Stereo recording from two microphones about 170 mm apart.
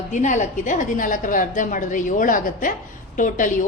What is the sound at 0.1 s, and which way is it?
A woman's voice, 45° left (ahead or behind).